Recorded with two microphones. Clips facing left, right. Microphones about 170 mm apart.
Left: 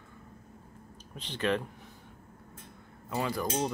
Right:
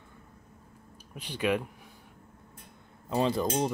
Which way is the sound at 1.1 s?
10° right (ahead or behind).